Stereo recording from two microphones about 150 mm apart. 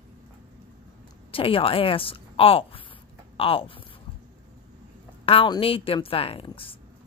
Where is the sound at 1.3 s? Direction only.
35° left (ahead or behind).